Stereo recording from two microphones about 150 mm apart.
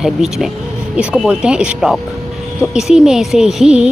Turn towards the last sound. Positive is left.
turn(degrees=-5)  # may be behind; listen again after turning